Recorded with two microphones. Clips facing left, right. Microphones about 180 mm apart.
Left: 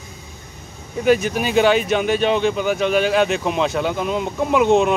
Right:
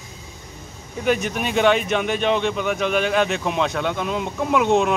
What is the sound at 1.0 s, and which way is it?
Speech, centre (ahead or behind).